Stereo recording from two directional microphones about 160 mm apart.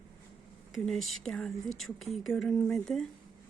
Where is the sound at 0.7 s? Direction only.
Centre (ahead or behind).